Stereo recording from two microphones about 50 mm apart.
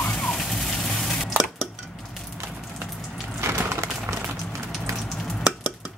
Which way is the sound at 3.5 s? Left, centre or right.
Right.